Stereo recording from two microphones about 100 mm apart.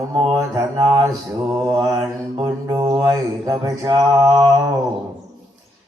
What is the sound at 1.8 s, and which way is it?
Mantra, 40° right (ahead or behind).